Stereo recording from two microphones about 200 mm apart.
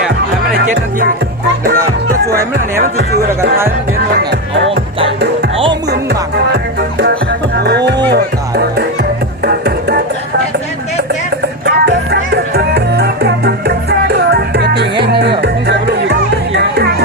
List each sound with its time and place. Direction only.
0.4 s music: 45° right (ahead or behind); by 4.8 s 65° right (ahead or behind)
5.9 s music: 55° right (ahead or behind)
11.6 s music: 60° right (ahead or behind)